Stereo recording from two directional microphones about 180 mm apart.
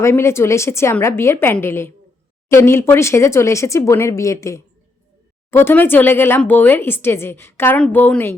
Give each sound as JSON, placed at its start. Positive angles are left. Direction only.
{"t": 0.0, "sound": "speech", "side_deg": 15}